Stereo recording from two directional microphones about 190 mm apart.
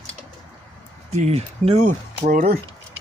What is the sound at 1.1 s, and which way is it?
Speech, 35° right (ahead or behind).